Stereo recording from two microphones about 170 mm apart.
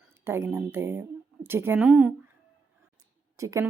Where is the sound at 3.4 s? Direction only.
20° right (ahead or behind).